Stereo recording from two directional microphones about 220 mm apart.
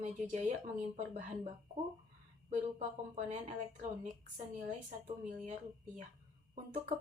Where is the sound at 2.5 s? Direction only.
35° right (ahead or behind).